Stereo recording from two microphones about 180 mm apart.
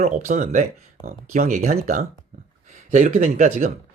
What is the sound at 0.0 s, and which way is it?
Speech, 45° right (ahead or behind).